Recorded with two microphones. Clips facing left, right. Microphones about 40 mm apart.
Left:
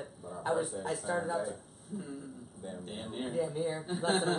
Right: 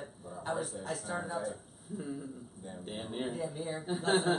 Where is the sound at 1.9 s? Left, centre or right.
Centre.